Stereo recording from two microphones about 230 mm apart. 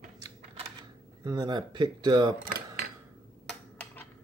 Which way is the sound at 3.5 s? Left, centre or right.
Centre.